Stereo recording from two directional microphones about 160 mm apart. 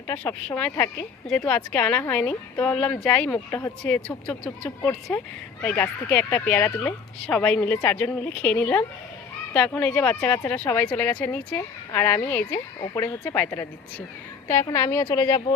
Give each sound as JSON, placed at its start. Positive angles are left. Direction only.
{"t": 0.1, "sound": "speech", "side_deg": 10}